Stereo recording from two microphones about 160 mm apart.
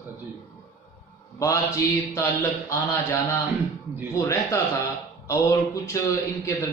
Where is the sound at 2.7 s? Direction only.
15° left (ahead or behind).